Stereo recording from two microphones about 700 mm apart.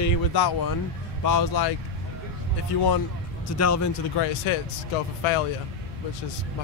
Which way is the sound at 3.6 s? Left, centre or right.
Left.